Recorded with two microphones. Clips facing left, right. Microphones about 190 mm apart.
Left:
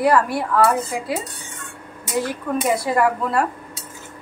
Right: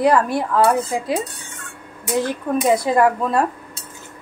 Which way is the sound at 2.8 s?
20° right (ahead or behind).